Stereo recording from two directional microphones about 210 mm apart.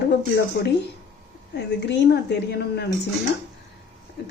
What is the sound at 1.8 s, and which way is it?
A woman's voice, 55° left (ahead or behind).